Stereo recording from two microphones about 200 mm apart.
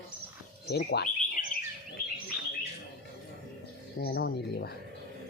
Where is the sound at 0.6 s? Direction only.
50° left (ahead or behind).